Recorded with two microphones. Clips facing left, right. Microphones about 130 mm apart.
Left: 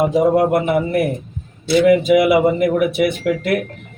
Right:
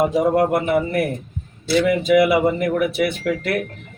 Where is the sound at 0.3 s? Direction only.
10° left (ahead or behind).